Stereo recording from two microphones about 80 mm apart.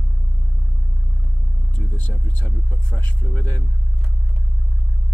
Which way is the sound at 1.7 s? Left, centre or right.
Left.